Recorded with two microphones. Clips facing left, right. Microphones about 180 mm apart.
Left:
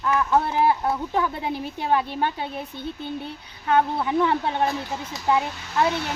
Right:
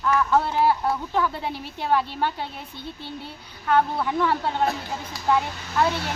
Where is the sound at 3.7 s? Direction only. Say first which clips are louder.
Left 1 dB; 20° left (ahead or behind).